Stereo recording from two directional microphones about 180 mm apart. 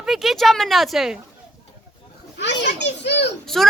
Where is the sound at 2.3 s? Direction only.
75° left (ahead or behind).